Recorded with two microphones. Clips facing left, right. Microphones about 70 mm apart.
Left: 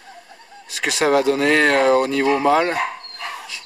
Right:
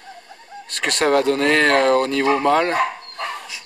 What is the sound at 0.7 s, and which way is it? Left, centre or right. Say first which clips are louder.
Speech: even; centre.